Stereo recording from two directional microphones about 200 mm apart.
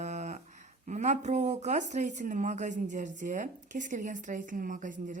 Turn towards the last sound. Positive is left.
turn(degrees=-40)  # may be behind; listen again after turning